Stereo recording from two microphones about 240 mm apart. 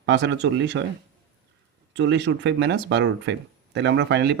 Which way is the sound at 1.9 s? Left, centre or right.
Right.